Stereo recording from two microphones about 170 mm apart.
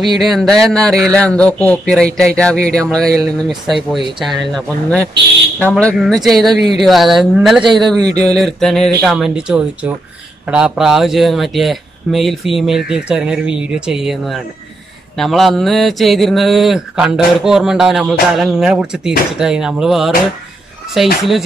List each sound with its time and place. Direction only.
0.0 s speech: centre (ahead or behind)
5.6 s speech: 5° left (ahead or behind)
7.6 s speech: 25° right (ahead or behind)
8.4 s speech: centre (ahead or behind)